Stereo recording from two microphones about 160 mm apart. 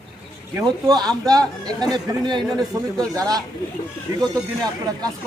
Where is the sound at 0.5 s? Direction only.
20° right (ahead or behind).